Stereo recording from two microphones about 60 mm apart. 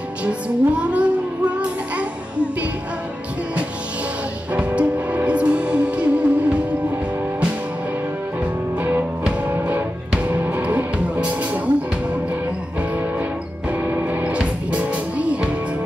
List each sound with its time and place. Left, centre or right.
0.2 s music: centre
4.5 s music: right
8.7 s music: right
13.7 s music: right